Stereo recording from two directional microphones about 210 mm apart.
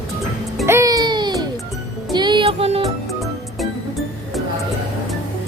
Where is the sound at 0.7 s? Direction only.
15° right (ahead or behind).